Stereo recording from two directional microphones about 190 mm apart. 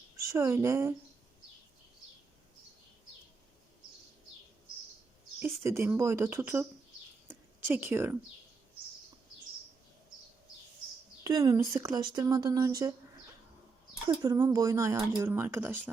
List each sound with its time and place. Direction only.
0.3 s speech: 15° right (ahead or behind)
5.4 s speech: 15° right (ahead or behind)
7.3 s a sound: 10° right (ahead or behind)
11.2 s a woman's voice: 20° right (ahead or behind)
14.1 s speech: 15° right (ahead or behind)